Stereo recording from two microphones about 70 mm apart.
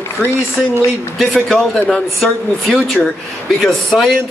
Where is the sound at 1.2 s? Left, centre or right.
Centre.